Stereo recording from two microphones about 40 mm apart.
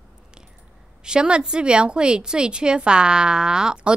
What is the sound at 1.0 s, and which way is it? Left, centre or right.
A woman's voice, right.